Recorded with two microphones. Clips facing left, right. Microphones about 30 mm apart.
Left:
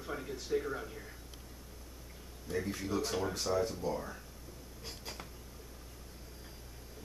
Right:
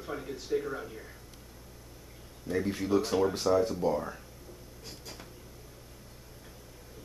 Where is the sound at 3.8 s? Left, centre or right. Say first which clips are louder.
Right 7 dB; right.